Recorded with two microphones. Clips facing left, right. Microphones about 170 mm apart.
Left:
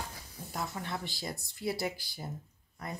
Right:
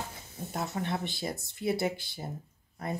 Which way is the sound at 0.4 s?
25° right (ahead or behind).